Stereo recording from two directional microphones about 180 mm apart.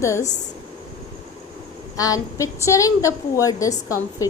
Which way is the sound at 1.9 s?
20° left (ahead or behind).